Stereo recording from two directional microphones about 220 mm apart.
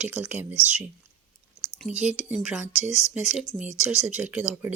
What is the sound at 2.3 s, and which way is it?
Speech, 5° right (ahead or behind).